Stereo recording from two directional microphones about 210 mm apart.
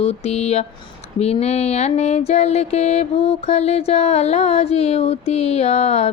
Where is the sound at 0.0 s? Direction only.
30° left (ahead or behind).